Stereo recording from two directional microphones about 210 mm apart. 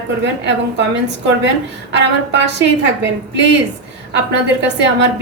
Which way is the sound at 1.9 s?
55° right (ahead or behind).